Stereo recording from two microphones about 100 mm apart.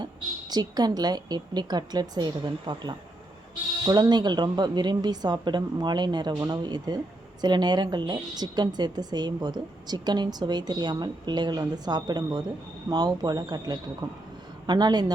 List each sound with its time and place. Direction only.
0.5 s a woman's voice: 40° right (ahead or behind)